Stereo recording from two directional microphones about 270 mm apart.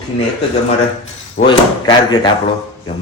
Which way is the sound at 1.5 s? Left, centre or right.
Centre.